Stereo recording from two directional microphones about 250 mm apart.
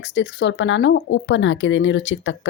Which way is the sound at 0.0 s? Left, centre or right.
Left.